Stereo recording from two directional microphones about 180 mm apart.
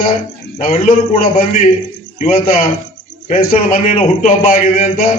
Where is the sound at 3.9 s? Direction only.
35° left (ahead or behind).